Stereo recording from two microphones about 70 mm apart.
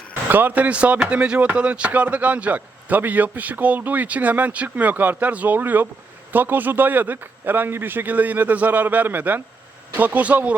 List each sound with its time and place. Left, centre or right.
0.3 s speech: right